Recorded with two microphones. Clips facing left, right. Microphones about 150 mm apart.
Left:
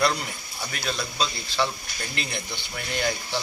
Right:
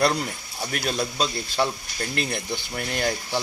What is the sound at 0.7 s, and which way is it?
Speech, 45° right (ahead or behind).